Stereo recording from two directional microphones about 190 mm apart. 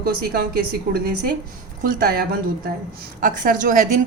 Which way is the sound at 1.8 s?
50° right (ahead or behind).